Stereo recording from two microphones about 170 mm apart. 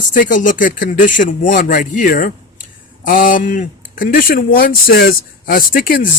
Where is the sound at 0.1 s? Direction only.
50° left (ahead or behind).